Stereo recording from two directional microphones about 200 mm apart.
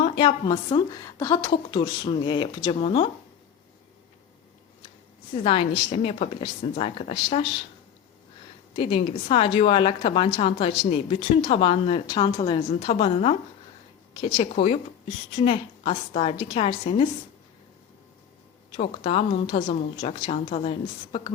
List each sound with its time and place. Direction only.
0.0 s a woman's voice: 25° left (ahead or behind)
5.4 s a woman's voice: 25° left (ahead or behind)
8.7 s a woman's voice: 30° left (ahead or behind)
18.8 s a woman's voice: 30° left (ahead or behind)